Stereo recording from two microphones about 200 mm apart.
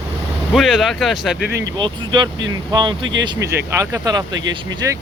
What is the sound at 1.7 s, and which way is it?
Speech, 25° right (ahead or behind).